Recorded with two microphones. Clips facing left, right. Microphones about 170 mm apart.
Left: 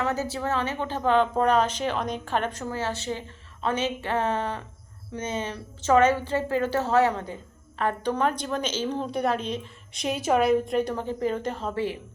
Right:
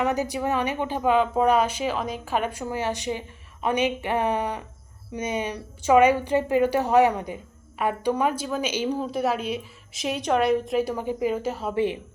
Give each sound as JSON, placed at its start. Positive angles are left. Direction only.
{"t": 0.0, "sound": "a woman's voice", "side_deg": -15}